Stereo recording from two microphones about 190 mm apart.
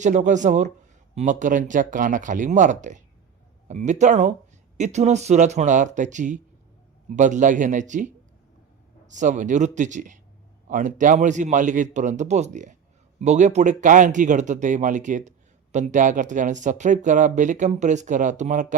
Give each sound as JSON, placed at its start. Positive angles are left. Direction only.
{"t": 0.0, "sound": "speech", "side_deg": -40}
{"t": 9.1, "sound": "speech", "side_deg": -40}